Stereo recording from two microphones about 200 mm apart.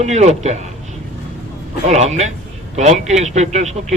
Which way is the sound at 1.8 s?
35° right (ahead or behind).